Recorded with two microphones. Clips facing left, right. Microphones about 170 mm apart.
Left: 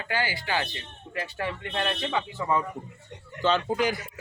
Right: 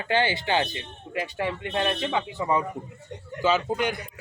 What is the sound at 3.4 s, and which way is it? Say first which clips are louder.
Speech: even; centre (ahead or behind).